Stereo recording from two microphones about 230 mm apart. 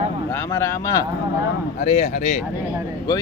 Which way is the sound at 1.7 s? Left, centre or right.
Left.